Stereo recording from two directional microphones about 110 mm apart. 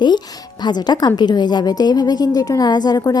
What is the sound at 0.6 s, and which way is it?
A woman's voice, 40° left (ahead or behind).